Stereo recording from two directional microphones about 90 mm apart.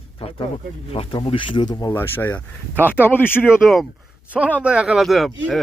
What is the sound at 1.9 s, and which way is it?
Speech, 25° left (ahead or behind).